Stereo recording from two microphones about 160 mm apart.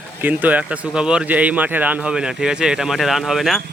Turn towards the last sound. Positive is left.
turn(degrees=0)  # may be behind; listen again after turning